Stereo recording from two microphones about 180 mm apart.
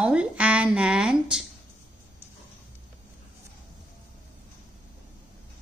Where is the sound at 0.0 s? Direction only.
5° right (ahead or behind).